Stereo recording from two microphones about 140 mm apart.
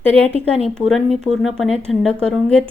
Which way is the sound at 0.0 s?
45° right (ahead or behind).